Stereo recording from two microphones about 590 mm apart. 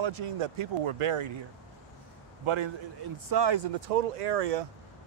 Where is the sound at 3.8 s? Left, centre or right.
Right.